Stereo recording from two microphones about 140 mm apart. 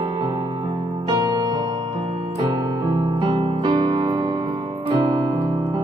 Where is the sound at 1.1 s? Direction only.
30° right (ahead or behind).